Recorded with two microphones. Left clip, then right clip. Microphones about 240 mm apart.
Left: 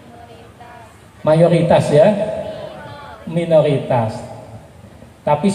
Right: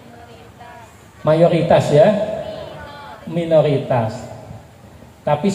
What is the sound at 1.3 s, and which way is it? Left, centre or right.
Speech, left.